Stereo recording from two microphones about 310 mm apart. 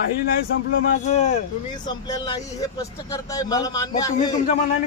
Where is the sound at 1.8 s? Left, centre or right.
Centre.